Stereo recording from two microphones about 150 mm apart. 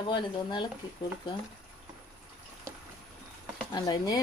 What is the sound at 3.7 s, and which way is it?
Speech, 25° left (ahead or behind).